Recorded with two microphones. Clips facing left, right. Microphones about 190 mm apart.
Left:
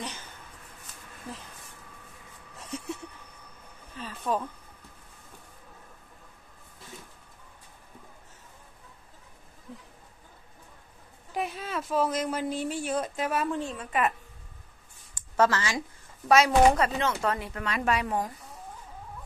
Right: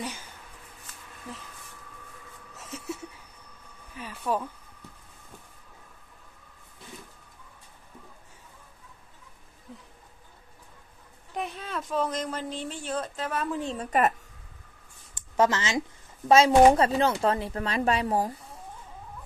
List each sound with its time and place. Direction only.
2.5 s a sound: centre (ahead or behind)
3.9 s speech: 10° right (ahead or behind)
11.3 s speech: 5° left (ahead or behind)
13.7 s speech: 40° right (ahead or behind)
15.1 s speech: 20° right (ahead or behind)